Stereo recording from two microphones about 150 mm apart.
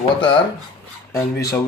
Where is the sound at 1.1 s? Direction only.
20° left (ahead or behind).